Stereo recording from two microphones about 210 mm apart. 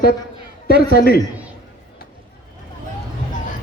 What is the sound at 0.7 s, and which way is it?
Speech, 45° left (ahead or behind).